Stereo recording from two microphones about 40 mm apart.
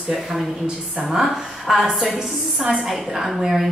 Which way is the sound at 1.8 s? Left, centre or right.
Centre.